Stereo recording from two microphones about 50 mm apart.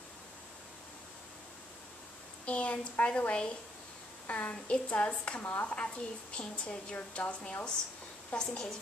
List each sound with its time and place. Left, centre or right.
2.4 s a woman's voice: left
5.4 s a woman's voice: left
8.4 s a woman's voice: centre